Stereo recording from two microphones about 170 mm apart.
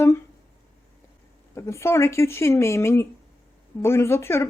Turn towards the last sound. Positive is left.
turn(degrees=15)  # may be behind; listen again after turning